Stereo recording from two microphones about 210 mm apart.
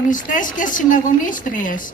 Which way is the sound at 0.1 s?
40° left (ahead or behind).